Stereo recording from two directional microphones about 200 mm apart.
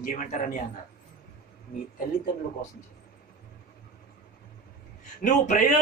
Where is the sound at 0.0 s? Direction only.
40° left (ahead or behind).